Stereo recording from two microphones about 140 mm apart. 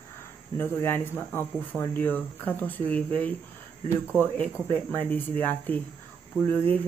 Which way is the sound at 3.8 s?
10° right (ahead or behind).